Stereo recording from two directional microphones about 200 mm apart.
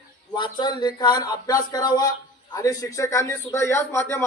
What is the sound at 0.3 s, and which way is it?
A man's voice, 20° left (ahead or behind).